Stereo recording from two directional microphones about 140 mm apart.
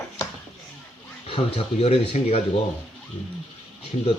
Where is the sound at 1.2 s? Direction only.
45° left (ahead or behind).